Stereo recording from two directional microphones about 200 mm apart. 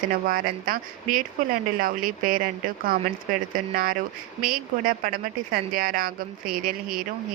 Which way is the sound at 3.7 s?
45° right (ahead or behind).